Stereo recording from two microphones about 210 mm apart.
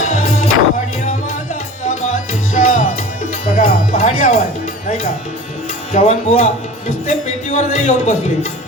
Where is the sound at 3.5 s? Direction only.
40° left (ahead or behind).